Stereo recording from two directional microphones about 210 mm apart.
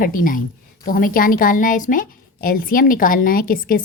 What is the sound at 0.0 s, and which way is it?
A woman's voice, 40° left (ahead or behind).